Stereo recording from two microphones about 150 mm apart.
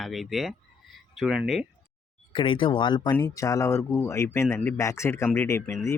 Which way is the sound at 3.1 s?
20° left (ahead or behind).